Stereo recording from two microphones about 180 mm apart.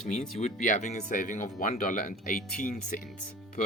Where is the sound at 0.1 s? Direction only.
40° left (ahead or behind).